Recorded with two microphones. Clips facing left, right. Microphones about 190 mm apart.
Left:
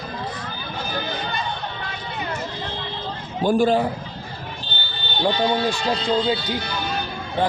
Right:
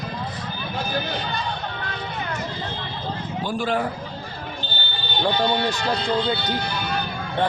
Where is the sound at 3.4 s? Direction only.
45° left (ahead or behind).